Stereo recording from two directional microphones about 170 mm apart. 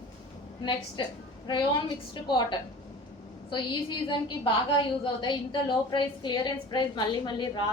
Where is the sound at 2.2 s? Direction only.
25° left (ahead or behind).